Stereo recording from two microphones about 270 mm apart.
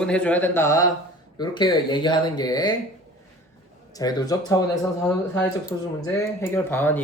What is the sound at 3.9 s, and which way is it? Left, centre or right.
Speech, centre.